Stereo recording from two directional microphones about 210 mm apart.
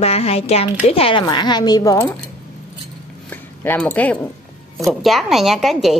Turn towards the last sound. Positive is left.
turn(degrees=0)  # may be behind; listen again after turning